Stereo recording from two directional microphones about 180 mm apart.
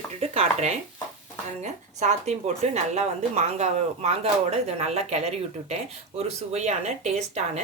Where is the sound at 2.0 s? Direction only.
40° right (ahead or behind).